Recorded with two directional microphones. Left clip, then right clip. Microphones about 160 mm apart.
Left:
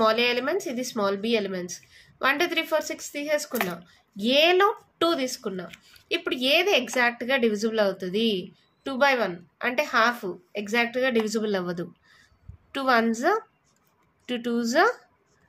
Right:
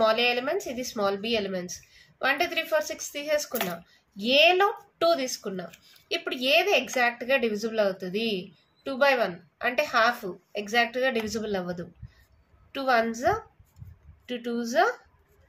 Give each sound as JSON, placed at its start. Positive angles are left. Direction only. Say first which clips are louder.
{"t": 0.0, "sound": "speech", "louder": "left 1 dB", "side_deg": 35}